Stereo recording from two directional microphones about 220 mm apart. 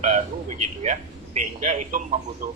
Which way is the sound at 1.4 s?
35° right (ahead or behind).